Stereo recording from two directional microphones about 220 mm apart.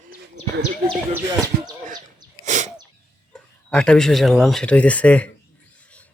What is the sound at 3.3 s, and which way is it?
Speech, 5° left (ahead or behind).